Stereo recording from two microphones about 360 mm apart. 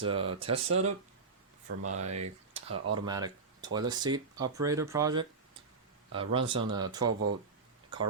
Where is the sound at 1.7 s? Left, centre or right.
Right.